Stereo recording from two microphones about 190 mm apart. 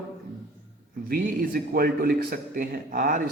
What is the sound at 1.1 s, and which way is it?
Speech, 50° right (ahead or behind).